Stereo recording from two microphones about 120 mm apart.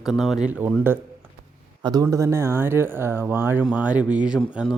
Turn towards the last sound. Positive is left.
turn(degrees=-5)  # may be behind; listen again after turning